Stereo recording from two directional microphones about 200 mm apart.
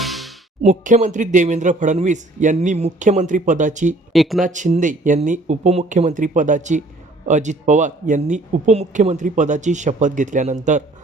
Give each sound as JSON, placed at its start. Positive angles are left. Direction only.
{"t": 0.0, "sound": "music", "side_deg": 0}
{"t": 0.6, "sound": "speech", "side_deg": -35}
{"t": 4.1, "sound": "speech", "side_deg": 0}
{"t": 4.4, "sound": "speech", "side_deg": -40}